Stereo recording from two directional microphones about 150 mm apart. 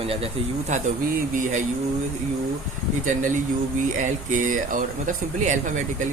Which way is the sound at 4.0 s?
60° right (ahead or behind).